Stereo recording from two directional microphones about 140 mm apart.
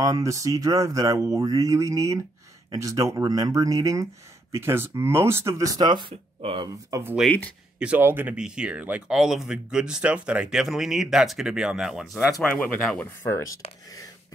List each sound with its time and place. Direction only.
0.0 s speech: 25° right (ahead or behind)
6.9 s speech: 15° right (ahead or behind)
7.2 s speech: 10° left (ahead or behind)
7.8 s speech: 10° right (ahead or behind)
12.4 s speech: 10° left (ahead or behind)
13.3 s speech: 25° left (ahead or behind)